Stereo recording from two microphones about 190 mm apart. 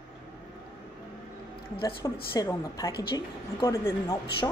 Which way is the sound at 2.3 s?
20° left (ahead or behind).